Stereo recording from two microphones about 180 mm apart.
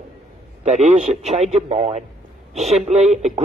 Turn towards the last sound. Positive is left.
turn(degrees=-40)  # may be behind; listen again after turning